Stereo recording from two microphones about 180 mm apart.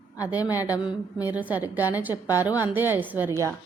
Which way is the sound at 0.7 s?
5° right (ahead or behind).